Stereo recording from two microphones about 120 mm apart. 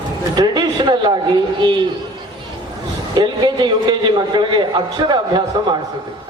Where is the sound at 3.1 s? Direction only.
40° right (ahead or behind).